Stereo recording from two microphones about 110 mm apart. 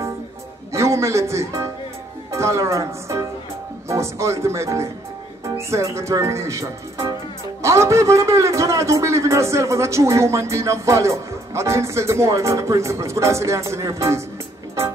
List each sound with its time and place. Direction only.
0.7 s a man's voice: 25° right (ahead or behind)